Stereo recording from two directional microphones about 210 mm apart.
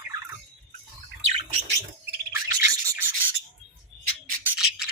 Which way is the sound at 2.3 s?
15° right (ahead or behind).